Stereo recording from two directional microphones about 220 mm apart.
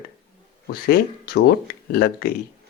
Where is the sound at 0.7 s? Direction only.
45° left (ahead or behind).